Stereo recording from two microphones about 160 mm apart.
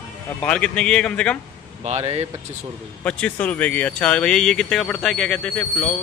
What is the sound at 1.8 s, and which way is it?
Speech, 40° right (ahead or behind).